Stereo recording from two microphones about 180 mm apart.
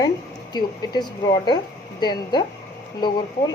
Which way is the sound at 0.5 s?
25° left (ahead or behind).